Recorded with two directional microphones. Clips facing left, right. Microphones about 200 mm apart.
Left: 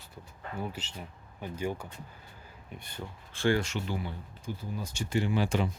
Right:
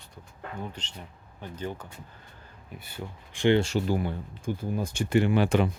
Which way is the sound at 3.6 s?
35° right (ahead or behind).